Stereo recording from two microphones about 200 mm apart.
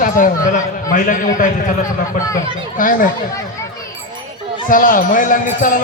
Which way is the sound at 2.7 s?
40° left (ahead or behind).